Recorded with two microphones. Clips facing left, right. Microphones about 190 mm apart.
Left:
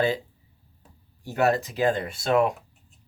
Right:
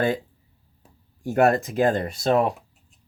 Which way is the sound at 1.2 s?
50° right (ahead or behind).